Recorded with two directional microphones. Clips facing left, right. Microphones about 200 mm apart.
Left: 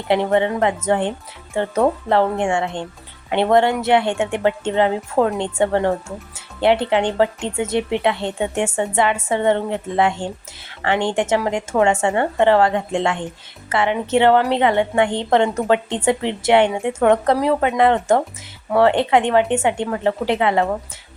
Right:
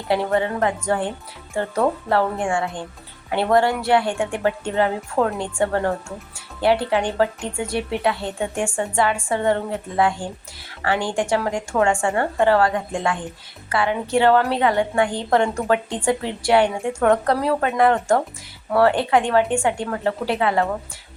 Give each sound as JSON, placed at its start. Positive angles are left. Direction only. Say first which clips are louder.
{"t": 0.1, "sound": "a woman's voice", "louder": "left 3 dB", "side_deg": 20}